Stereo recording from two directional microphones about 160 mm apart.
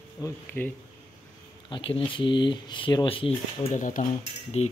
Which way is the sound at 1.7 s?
30° left (ahead or behind).